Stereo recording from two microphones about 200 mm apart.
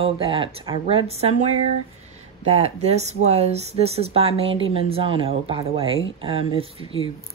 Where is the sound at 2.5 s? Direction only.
30° right (ahead or behind).